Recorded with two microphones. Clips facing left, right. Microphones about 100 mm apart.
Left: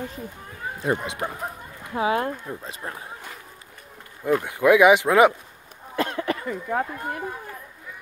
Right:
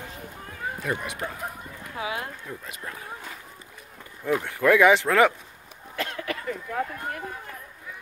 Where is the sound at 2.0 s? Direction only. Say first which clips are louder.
Left 9 dB; 40° left (ahead or behind).